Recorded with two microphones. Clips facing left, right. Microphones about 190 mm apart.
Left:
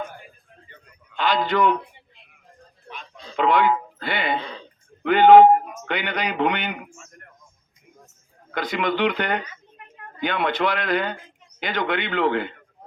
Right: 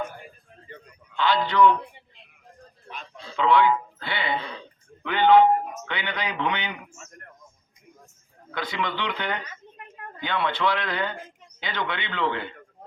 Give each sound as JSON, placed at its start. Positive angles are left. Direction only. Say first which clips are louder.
{"t": 1.1, "sound": "a man's voice", "louder": "left 1 dB", "side_deg": 45}
{"t": 3.3, "sound": "a man's voice", "louder": "left 1 dB", "side_deg": 50}
{"t": 8.5, "sound": "a man's voice", "louder": "left 6 dB", "side_deg": 45}